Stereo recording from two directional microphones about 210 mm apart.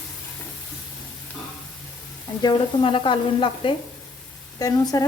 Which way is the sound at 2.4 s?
20° left (ahead or behind).